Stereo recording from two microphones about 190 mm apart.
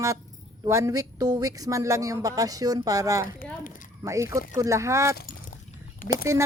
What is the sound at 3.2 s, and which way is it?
Speech, 45° left (ahead or behind).